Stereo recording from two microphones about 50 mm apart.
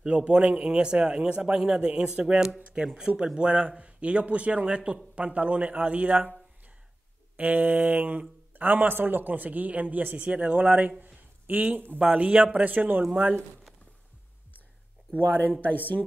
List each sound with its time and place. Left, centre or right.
0.0 s a man's voice: centre
3.3 s a man's voice: right
7.3 s speech: right
15.2 s speech: right